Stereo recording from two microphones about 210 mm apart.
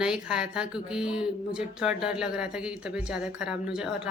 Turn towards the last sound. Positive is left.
turn(degrees=-5)  # may be behind; listen again after turning